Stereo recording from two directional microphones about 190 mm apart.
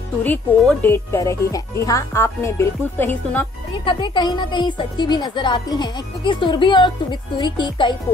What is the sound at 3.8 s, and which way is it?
Speech, 25° left (ahead or behind).